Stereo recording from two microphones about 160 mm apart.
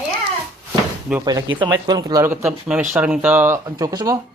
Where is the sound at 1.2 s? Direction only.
25° right (ahead or behind).